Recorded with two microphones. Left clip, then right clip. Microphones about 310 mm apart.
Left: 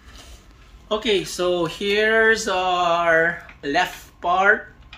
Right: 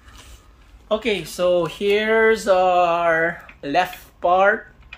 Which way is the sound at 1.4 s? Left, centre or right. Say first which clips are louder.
Right 3 dB; right.